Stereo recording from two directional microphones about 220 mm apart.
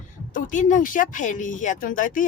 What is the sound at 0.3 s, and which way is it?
Speech, 35° left (ahead or behind).